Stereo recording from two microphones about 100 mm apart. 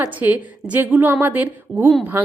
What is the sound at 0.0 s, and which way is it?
A woman's voice, 15° right (ahead or behind).